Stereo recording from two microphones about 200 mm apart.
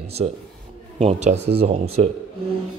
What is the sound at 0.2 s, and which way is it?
Speech, 35° right (ahead or behind).